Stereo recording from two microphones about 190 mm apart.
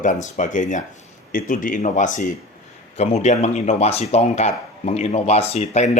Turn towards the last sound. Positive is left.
turn(degrees=35)  # may be behind; listen again after turning